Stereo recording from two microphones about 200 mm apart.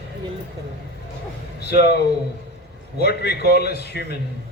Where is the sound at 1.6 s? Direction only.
55° left (ahead or behind).